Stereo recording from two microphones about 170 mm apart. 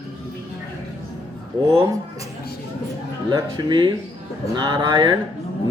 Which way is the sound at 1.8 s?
20° right (ahead or behind).